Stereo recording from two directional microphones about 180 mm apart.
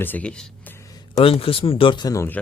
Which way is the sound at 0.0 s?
10° left (ahead or behind).